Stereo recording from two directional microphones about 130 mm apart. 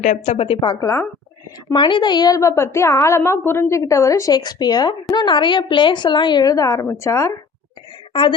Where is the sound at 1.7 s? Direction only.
40° left (ahead or behind); by 7.3 s 20° left (ahead or behind).